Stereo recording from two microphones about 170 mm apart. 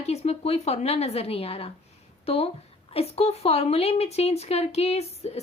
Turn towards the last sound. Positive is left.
turn(degrees=40)  # may be behind; listen again after turning